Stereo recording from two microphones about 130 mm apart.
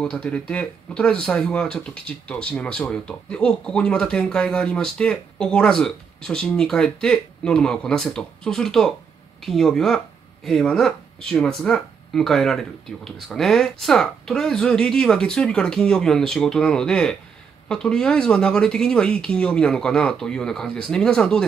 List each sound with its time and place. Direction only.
0.0 s speech: 10° left (ahead or behind)